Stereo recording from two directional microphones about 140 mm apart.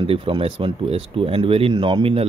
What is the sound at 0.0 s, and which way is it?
Speech, 40° right (ahead or behind).